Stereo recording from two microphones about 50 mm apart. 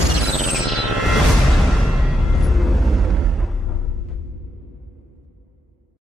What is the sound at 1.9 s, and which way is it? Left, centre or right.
Music, centre.